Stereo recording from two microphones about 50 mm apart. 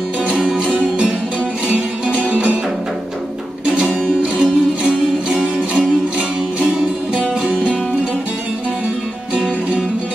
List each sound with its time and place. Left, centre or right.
0.7 s music: right
3.6 s music: right